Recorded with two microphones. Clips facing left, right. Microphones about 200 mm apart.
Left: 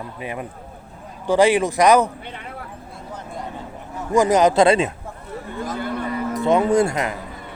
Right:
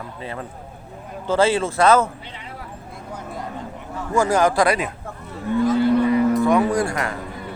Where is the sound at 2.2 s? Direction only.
55° left (ahead or behind).